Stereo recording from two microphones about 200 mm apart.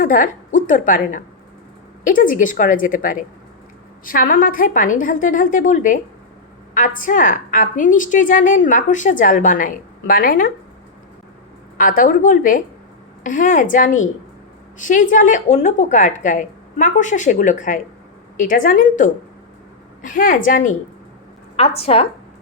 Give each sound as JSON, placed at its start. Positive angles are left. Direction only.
{"t": 0.0, "sound": "a woman's voice", "side_deg": 40}
{"t": 11.8, "sound": "a woman's voice", "side_deg": 45}
{"t": 21.5, "sound": "a woman's voice", "side_deg": 30}